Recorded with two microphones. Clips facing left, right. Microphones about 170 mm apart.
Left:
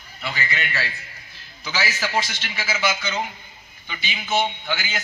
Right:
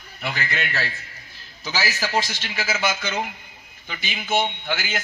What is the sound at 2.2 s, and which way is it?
A man's voice, 50° right (ahead or behind).